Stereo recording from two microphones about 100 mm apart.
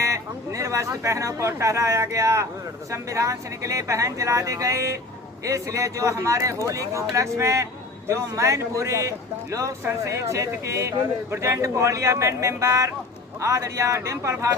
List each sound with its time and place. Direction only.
0.0 s a man's voice: 30° right (ahead or behind)